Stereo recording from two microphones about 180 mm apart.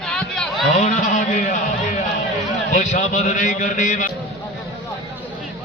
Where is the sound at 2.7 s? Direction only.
40° left (ahead or behind).